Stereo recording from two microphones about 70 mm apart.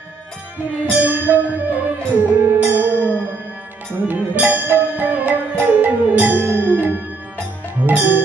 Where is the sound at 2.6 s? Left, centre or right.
Right.